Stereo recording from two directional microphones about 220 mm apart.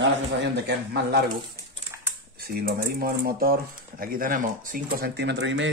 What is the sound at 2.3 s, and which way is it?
Speech, 45° right (ahead or behind).